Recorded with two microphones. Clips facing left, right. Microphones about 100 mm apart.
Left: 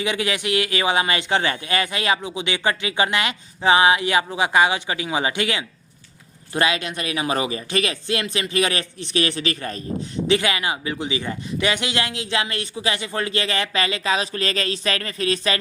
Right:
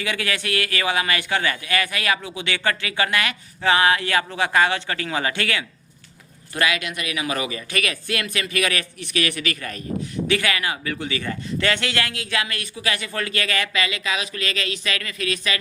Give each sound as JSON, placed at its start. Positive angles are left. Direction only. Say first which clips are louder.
{"t": 0.0, "sound": "a man's voice", "louder": "left 3 dB", "side_deg": 20}